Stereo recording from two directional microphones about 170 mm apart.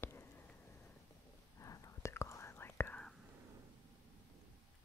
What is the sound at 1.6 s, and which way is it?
Whispering, 20° left (ahead or behind).